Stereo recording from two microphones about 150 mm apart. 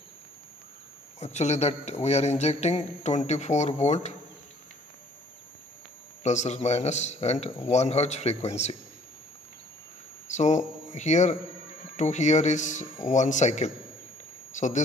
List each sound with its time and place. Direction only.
1.2 s a man's voice: 50° left (ahead or behind)
6.2 s a man's voice: 50° left (ahead or behind)
10.3 s a man's voice: 50° left (ahead or behind)